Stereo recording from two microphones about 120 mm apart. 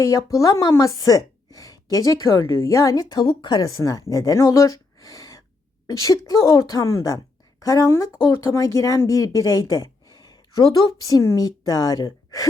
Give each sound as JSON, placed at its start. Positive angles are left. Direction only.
{"t": 0.0, "sound": "a woman's voice", "side_deg": 25}